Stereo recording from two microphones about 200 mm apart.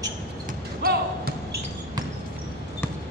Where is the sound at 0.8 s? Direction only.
50° right (ahead or behind).